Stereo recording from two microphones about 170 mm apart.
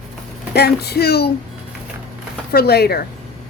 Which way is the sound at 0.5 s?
70° left (ahead or behind).